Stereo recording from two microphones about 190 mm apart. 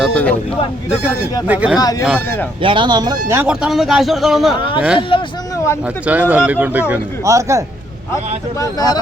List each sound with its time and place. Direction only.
0.0 s a sound: 5° left (ahead or behind)
1.5 s a man's voice: 5° right (ahead or behind)
1.8 s speech: 20° left (ahead or behind)
2.0 s speech: 5° left (ahead or behind)
2.6 s speech: 25° right (ahead or behind)
3.2 s speech: 10° right (ahead or behind)
4.9 s speech: 25° left (ahead or behind)
5.8 s a man's voice: 10° right (ahead or behind)
8.5 s speech: 20° left (ahead or behind)